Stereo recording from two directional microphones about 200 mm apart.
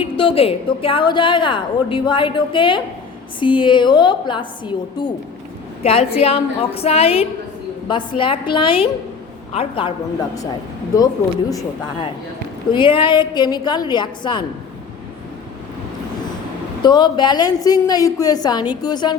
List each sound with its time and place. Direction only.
0.0 s a woman's voice: 25° left (ahead or behind)
10.9 s a woman's voice: 15° left (ahead or behind)
16.8 s a woman's voice: 20° left (ahead or behind)